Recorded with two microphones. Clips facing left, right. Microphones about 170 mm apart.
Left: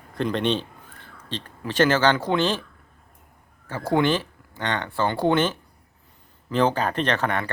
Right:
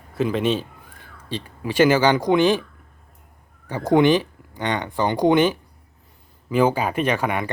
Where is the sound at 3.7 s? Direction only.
20° right (ahead or behind).